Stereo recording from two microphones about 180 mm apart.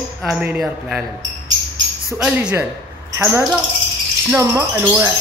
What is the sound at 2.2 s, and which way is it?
Speech, 5° right (ahead or behind).